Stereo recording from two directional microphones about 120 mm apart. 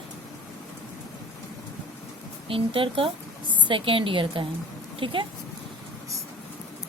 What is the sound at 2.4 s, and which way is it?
A woman's voice, 50° right (ahead or behind).